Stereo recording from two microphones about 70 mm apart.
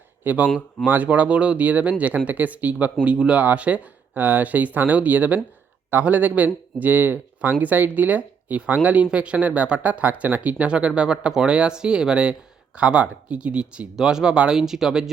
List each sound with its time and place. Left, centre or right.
0.3 s speech: right; by 15.1 s centre